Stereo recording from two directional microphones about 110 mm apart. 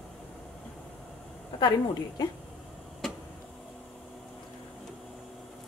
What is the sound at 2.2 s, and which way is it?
Speech, 40° left (ahead or behind).